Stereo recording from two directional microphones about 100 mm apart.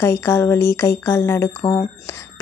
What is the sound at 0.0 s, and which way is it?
A woman's voice, 25° left (ahead or behind).